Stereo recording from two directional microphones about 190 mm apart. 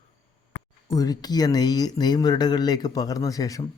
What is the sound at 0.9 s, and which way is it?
Speech, 20° left (ahead or behind).